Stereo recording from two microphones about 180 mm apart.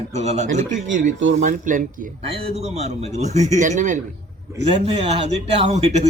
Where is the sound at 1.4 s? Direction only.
45° right (ahead or behind).